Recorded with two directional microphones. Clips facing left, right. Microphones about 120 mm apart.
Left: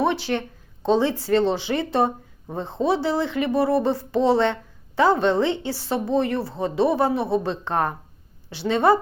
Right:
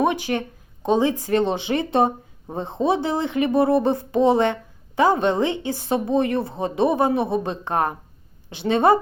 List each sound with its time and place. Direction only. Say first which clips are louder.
0.0 s a woman's voice: right 1 dB; 15° right (ahead or behind)